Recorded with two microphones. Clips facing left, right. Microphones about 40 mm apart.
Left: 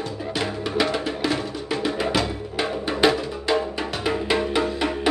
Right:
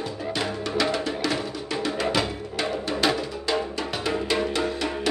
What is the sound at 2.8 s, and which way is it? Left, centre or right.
Music, centre.